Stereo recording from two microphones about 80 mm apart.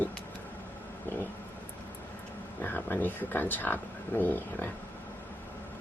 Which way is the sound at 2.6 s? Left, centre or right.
Left.